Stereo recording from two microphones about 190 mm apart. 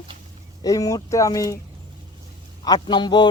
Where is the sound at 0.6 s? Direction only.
20° left (ahead or behind).